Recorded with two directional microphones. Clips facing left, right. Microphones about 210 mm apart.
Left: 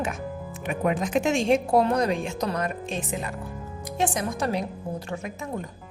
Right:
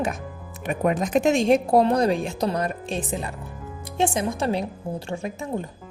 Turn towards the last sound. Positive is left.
turn(degrees=-30)  # may be behind; listen again after turning